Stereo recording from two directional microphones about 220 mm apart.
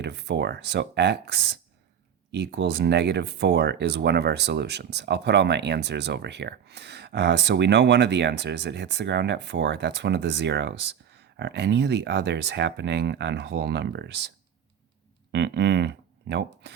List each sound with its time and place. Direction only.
0.0 s speech: 50° right (ahead or behind)
15.3 s speech: 50° right (ahead or behind)